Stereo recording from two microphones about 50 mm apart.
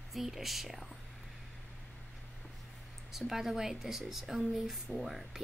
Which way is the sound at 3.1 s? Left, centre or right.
Centre.